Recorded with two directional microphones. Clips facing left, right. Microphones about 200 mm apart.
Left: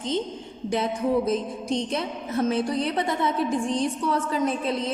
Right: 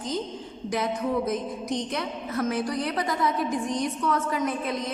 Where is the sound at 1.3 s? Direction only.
25° left (ahead or behind).